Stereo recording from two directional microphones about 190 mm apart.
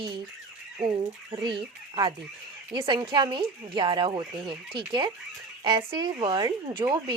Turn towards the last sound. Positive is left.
turn(degrees=-20)  # may be behind; listen again after turning